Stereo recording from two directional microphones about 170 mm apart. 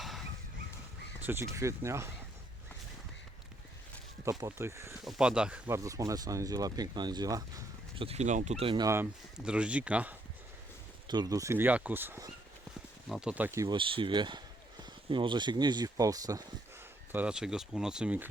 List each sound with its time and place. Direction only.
0.0 s a sound: centre (ahead or behind)
1.2 s speech: 15° right (ahead or behind)
4.3 s speech: 20° right (ahead or behind)
5.0 s speech: 5° right (ahead or behind); by 7.4 s 20° right (ahead or behind)
7.9 s speech: 35° right (ahead or behind)
9.4 s speech: 5° right (ahead or behind)
11.1 s speech: 25° right (ahead or behind)
13.7 s speech: 30° right (ahead or behind)
17.1 s speech: 10° right (ahead or behind)